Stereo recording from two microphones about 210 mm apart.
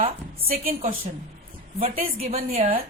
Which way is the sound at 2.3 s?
30° right (ahead or behind).